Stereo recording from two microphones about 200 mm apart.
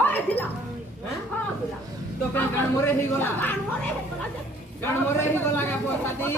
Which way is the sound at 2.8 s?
10° left (ahead or behind).